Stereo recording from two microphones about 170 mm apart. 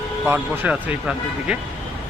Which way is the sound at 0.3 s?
10° right (ahead or behind).